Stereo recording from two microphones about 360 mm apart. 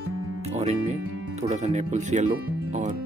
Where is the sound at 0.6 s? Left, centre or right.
Centre.